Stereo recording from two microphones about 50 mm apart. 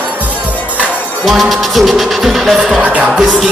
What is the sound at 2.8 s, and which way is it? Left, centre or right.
Speech, right.